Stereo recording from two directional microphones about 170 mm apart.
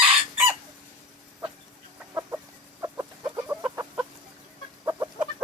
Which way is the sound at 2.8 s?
20° right (ahead or behind).